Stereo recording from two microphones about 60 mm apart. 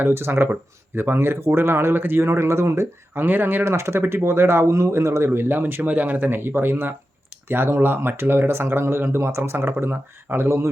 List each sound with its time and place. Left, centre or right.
0.0 s speech: right
3.2 s speech: right
3.6 s speech: right